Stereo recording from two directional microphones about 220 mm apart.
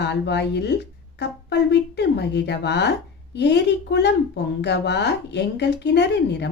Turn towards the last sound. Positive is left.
turn(degrees=50)  # may be behind; listen again after turning